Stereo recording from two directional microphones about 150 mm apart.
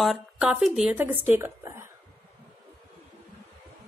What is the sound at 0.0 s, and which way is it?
Speech, 5° right (ahead or behind).